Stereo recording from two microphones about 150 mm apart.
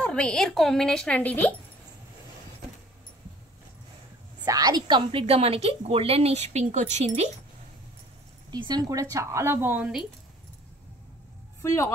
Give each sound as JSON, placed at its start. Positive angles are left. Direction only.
{"t": 0.0, "sound": "a woman's voice", "side_deg": 5}
{"t": 4.5, "sound": "a woman's voice", "side_deg": -25}
{"t": 8.5, "sound": "a woman's voice", "side_deg": -25}
{"t": 11.6, "sound": "speech", "side_deg": 20}